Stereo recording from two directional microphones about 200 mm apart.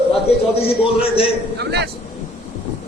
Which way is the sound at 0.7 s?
30° left (ahead or behind).